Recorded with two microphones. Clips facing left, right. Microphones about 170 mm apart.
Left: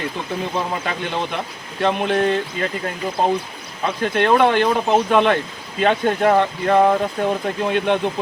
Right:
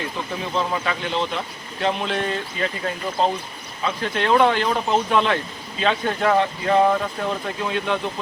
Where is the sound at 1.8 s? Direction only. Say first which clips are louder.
Left 4 dB; 55° left (ahead or behind).